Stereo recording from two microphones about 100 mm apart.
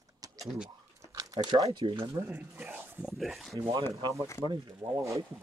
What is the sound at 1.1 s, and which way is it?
Speech, 40° right (ahead or behind).